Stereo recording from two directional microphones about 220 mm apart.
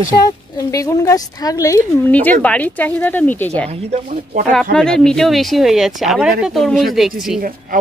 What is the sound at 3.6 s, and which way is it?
Speech, 35° right (ahead or behind).